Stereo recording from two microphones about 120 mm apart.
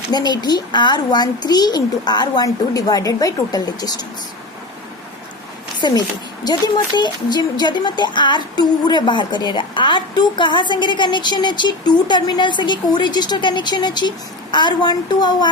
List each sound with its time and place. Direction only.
0.1 s a woman's voice: 35° left (ahead or behind)
5.8 s a woman's voice: 35° left (ahead or behind)